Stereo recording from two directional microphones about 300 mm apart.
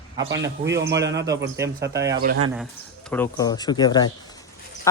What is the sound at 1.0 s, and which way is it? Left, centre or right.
Speech, right.